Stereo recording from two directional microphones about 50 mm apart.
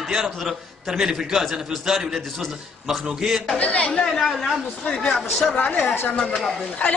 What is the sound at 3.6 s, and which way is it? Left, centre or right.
Speech, left.